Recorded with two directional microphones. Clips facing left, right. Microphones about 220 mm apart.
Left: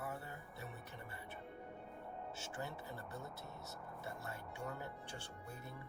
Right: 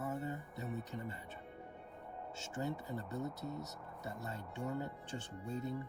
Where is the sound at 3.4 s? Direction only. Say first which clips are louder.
Right 7 dB; centre (ahead or behind).